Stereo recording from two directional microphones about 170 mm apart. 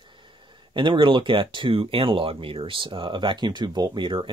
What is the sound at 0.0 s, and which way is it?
Speech, 30° right (ahead or behind).